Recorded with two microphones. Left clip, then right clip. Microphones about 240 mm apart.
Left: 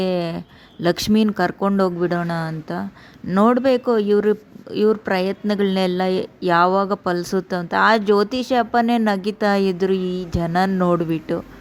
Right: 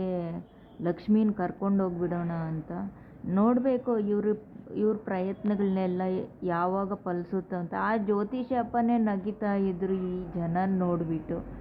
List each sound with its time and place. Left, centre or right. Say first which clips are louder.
0.0 s speech: left 11 dB; left